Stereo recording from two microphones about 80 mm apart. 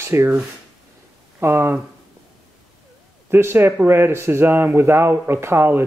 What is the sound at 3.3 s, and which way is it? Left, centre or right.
Speech, right.